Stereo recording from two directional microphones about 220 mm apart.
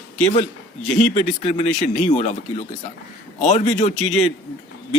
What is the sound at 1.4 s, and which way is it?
Speech, 30° left (ahead or behind).